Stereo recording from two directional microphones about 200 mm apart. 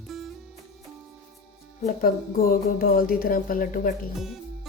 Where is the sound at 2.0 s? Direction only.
45° left (ahead or behind).